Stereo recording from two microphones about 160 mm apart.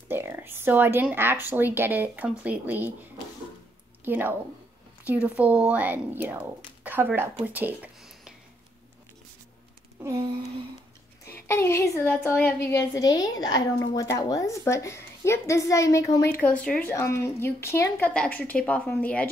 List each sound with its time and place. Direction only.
0.1 s speech: 15° right (ahead or behind)
4.0 s a woman's voice: 15° right (ahead or behind)
11.3 s a woman's voice: 15° left (ahead or behind)
16.3 s a woman's voice: 10° left (ahead or behind)